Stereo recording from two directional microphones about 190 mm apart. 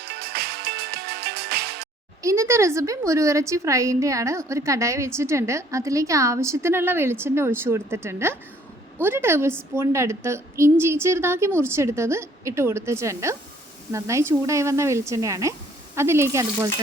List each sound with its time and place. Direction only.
0.0 s music: 55° right (ahead or behind)
2.2 s a woman's voice: 15° right (ahead or behind)